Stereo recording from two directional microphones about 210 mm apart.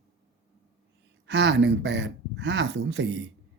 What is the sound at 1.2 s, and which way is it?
Speech, 55° right (ahead or behind).